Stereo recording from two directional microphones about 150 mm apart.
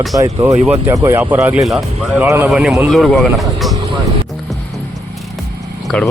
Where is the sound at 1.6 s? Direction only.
Centre (ahead or behind).